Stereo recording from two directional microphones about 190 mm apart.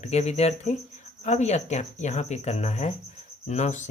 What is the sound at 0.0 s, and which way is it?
Speech, 35° left (ahead or behind).